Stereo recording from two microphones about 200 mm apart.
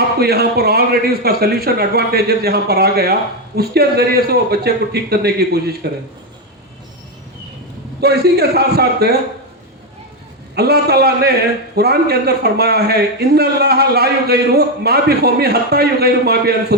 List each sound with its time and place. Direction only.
0.2 s a man's voice: 50° right (ahead or behind)
8.0 s a man's voice: 55° right (ahead or behind)
10.5 s a man's voice: 55° right (ahead or behind)